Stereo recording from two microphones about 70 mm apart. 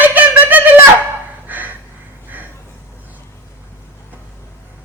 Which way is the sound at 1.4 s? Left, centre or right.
Right.